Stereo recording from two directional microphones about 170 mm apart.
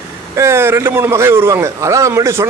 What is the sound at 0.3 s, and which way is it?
A man's voice, 15° right (ahead or behind).